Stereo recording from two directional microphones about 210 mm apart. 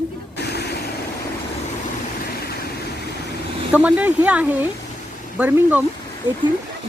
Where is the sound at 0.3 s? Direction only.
50° left (ahead or behind).